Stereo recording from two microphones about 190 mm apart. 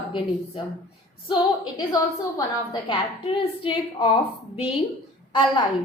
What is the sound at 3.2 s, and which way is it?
A woman's voice, 30° left (ahead or behind).